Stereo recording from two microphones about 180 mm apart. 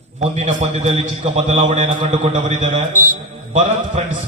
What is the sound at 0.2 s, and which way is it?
A man's voice, 40° right (ahead or behind).